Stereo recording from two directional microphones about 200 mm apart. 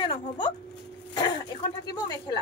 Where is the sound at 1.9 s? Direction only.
20° left (ahead or behind).